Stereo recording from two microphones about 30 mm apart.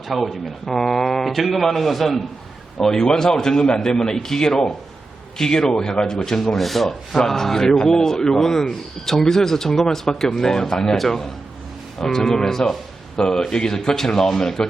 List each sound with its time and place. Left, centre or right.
0.1 s a man's voice: centre
0.7 s a man's voice: centre
2.8 s a man's voice: centre
6.6 s a man's voice: centre